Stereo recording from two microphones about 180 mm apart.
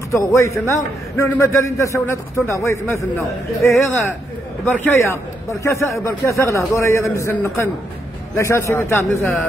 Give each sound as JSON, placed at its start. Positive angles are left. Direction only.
{"t": 0.1, "sound": "a man's voice", "side_deg": 15}
{"t": 4.8, "sound": "a man's voice", "side_deg": 15}